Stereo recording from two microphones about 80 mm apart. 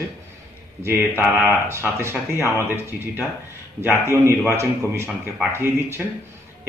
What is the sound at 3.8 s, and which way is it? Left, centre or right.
Speech, right.